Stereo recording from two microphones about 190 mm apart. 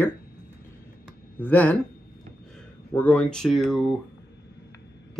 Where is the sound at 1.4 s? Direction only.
10° left (ahead or behind).